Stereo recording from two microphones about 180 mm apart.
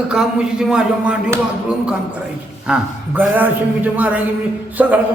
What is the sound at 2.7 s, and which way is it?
A man's voice, 5° right (ahead or behind).